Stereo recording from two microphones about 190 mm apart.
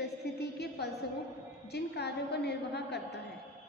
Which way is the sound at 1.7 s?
60° left (ahead or behind).